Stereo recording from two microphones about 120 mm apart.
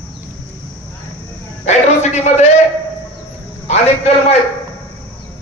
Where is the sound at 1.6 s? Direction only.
70° left (ahead or behind).